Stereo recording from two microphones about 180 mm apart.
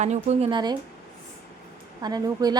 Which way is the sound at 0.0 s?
40° right (ahead or behind).